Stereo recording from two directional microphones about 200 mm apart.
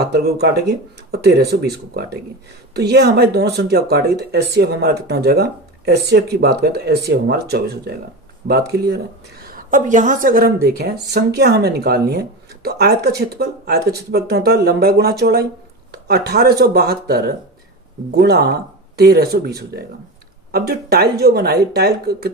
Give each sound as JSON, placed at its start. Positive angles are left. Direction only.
{"t": 0.0, "sound": "a woman's voice", "side_deg": -55}
{"t": 9.5, "sound": "a woman's voice", "side_deg": -45}